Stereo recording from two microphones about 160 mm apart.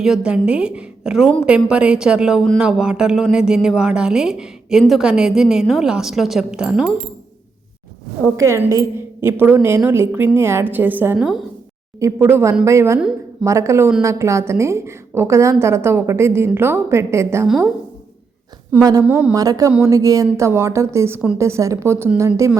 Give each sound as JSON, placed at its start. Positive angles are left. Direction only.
{"t": 0.0, "sound": "speech", "side_deg": -5}
{"t": 8.4, "sound": "a woman's voice", "side_deg": -20}
{"t": 18.7, "sound": "a woman's voice", "side_deg": -20}